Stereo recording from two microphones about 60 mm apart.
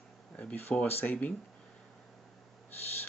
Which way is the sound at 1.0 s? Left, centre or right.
Left.